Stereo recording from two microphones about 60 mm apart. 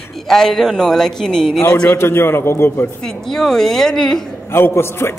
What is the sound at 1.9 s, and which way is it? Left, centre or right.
A man's voice, left.